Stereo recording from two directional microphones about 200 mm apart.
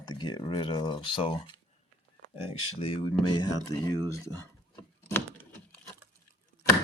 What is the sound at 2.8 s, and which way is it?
Speech, 25° left (ahead or behind).